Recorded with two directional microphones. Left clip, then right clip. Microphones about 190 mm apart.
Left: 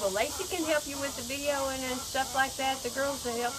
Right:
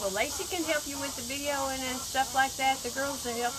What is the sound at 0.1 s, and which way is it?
Speech, 15° right (ahead or behind).